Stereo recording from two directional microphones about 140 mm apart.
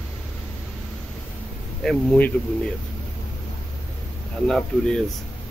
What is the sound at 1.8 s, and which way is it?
Speech, 5° left (ahead or behind).